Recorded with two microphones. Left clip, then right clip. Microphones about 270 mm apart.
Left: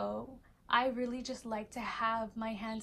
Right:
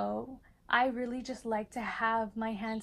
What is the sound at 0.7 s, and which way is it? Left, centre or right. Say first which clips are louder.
A woman's voice: right 2 dB; centre.